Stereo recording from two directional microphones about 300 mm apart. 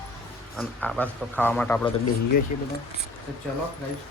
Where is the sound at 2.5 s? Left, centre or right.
Left.